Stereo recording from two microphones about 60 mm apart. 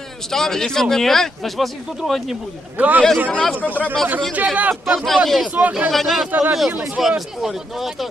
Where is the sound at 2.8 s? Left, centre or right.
Right.